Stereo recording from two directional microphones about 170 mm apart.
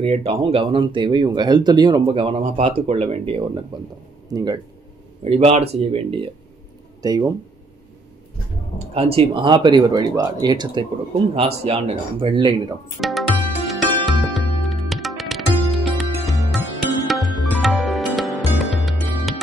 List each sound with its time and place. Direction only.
0.0 s speech: 40° right (ahead or behind)
4.3 s speech: 20° right (ahead or behind)
5.2 s speech: 35° right (ahead or behind)
7.0 s speech: 20° right (ahead or behind)
8.7 s speech: 35° right (ahead or behind)
11.3 s speech: 35° right (ahead or behind)
13.0 s music: centre (ahead or behind)